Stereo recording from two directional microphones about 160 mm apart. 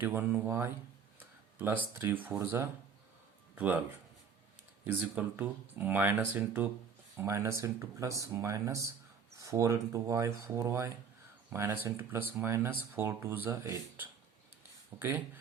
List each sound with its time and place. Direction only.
0.0 s speech: 10° right (ahead or behind)
4.9 s speech: 10° right (ahead or behind)